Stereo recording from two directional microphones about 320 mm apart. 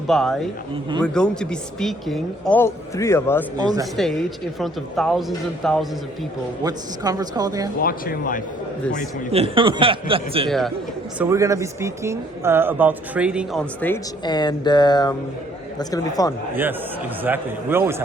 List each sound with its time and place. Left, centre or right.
0.1 s speech: centre
3.6 s speech: centre
4.6 s speech: centre
6.7 s speech: centre
7.8 s speech: left
9.3 s speech: centre
17.2 s speech: centre